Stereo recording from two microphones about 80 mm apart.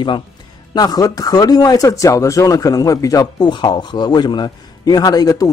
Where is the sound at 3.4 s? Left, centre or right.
Left.